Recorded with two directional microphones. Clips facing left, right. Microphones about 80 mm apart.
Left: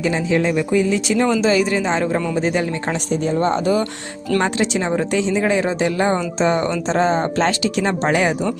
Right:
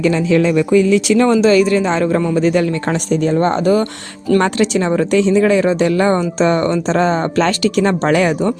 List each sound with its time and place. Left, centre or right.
0.0 s speech: right
1.3 s speech: right
4.4 s speech: right